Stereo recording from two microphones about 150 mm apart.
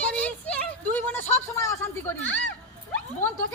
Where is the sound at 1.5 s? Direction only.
20° left (ahead or behind).